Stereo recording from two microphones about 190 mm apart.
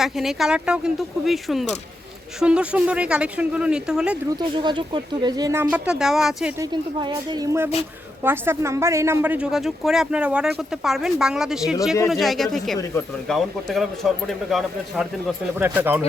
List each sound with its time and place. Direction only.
0.0 s a woman's voice: centre (ahead or behind)
4.4 s speech: 25° right (ahead or behind)
5.7 s a woman's voice: 5° right (ahead or behind)
6.6 s a woman's voice: 20° right (ahead or behind); by 15.0 s centre (ahead or behind)
15.5 s speech: 10° right (ahead or behind)